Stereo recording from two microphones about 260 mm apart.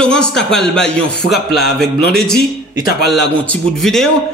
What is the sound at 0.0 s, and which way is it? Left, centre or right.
A man's voice, centre.